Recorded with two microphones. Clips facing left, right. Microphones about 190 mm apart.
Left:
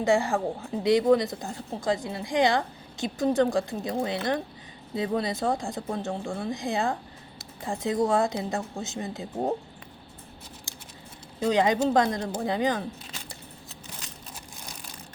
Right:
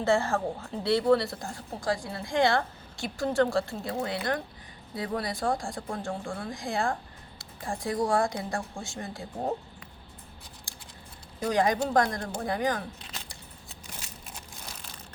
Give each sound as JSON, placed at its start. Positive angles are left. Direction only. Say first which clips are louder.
{"t": 0.0, "sound": "speech", "louder": "left 2 dB", "side_deg": 15}
{"t": 10.7, "sound": "scissors", "louder": "left 3 dB", "side_deg": 20}
{"t": 11.3, "sound": "speech", "louder": "left 3 dB", "side_deg": 20}